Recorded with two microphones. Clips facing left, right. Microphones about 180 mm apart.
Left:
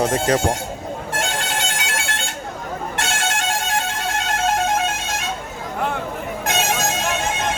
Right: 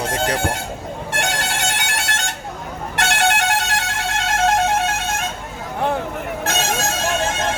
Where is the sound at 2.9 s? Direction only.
65° right (ahead or behind).